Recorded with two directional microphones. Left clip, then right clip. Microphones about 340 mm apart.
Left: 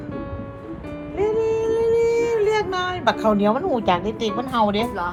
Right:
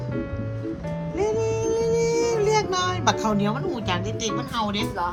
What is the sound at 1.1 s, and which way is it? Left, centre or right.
Child singing, centre.